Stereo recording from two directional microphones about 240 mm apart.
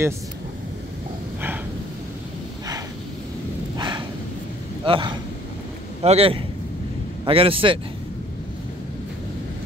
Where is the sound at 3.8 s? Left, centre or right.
Centre.